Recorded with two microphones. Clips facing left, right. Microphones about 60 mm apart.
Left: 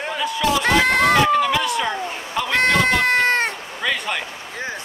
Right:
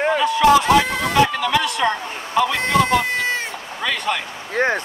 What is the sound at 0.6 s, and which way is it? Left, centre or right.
Speech, left.